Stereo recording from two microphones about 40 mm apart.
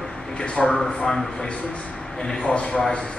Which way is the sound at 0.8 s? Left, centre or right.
Centre.